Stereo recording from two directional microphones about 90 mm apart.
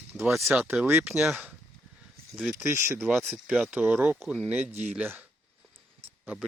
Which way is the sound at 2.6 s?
25° right (ahead or behind).